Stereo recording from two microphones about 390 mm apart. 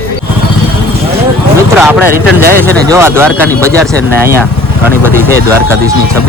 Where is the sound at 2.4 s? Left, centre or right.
Right.